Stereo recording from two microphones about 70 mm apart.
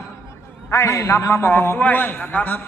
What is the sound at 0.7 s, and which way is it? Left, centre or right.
A man's voice, left.